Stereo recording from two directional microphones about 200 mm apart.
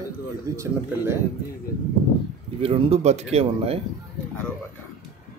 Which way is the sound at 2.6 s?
30° right (ahead or behind).